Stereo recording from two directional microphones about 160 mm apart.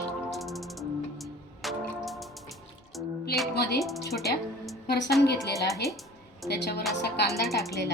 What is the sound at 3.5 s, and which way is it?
Music, 90° left.